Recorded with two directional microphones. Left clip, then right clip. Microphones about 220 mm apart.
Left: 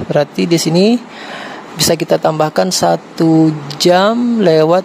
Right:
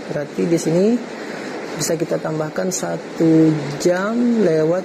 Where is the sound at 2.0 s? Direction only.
40° left (ahead or behind).